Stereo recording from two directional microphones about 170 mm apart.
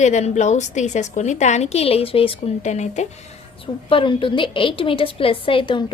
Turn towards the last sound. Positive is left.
turn(degrees=30)  # may be behind; listen again after turning